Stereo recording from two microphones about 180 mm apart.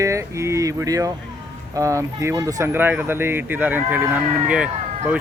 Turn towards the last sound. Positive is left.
turn(degrees=-5)  # may be behind; listen again after turning